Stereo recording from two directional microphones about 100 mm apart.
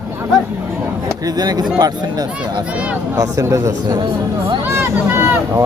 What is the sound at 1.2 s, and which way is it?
Speech, 40° right (ahead or behind).